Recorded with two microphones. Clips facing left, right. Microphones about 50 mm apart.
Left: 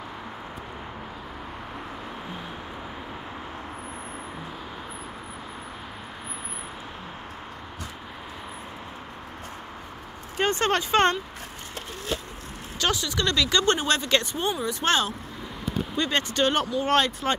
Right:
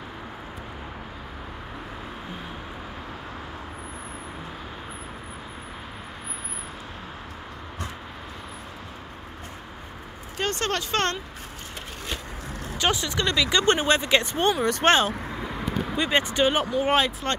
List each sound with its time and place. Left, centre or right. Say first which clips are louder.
10.4 s speech: left 3 dB; centre
12.7 s speech: right 1 dB; right
14.6 s speech: right 5 dB; right
14.9 s speech: right 4 dB; right
16.0 s speech: right 2 dB; centre